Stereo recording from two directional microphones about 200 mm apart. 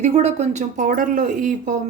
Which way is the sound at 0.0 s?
35° right (ahead or behind).